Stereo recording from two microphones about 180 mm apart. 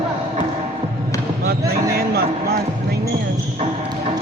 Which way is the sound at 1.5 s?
55° right (ahead or behind).